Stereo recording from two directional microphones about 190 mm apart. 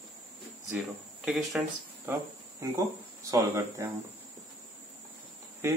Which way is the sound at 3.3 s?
15° right (ahead or behind).